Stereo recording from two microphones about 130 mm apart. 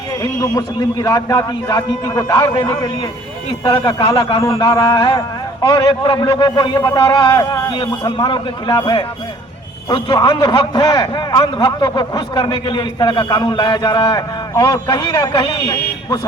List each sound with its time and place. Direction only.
0.2 s a man's voice: 25° left (ahead or behind); by 4.4 s 45° left (ahead or behind)
4.4 s a man's voice: 25° left (ahead or behind)
4.8 s a man's voice: 40° left (ahead or behind)